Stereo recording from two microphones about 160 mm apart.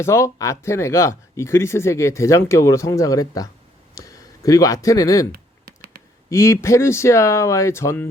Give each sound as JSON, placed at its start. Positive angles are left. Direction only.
{"t": 0.0, "sound": "speech", "side_deg": 15}
{"t": 5.6, "sound": "computer keyboard", "side_deg": -70}
{"t": 6.3, "sound": "speech", "side_deg": 15}